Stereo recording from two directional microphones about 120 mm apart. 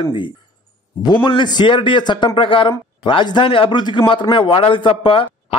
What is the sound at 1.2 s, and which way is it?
A man's voice, 40° left (ahead or behind).